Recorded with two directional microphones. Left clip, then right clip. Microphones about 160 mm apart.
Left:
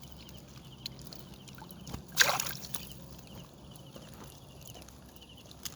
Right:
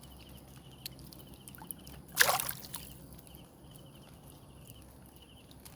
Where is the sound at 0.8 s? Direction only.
25° right (ahead or behind).